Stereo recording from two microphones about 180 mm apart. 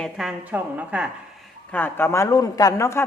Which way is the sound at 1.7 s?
10° left (ahead or behind).